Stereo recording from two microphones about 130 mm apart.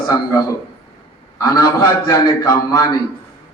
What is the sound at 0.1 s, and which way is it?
A man's voice, 25° left (ahead or behind).